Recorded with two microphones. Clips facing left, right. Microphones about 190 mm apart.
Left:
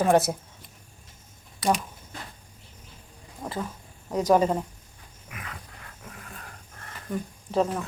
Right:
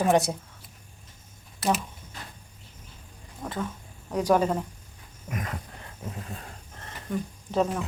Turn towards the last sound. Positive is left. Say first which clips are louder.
# left 1 dB
turn(degrees=0)  # may be behind; listen again after turning